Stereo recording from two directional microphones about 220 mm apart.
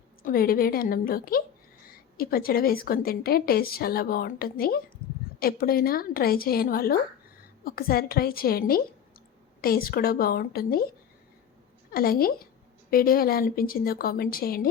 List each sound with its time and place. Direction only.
0.2 s a woman's voice: 40° left (ahead or behind)
11.9 s a woman's voice: 40° left (ahead or behind)